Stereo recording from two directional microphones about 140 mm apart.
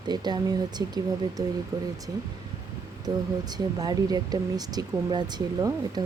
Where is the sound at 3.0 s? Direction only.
30° right (ahead or behind).